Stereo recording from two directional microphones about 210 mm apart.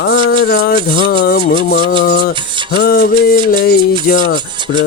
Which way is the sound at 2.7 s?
50° left (ahead or behind).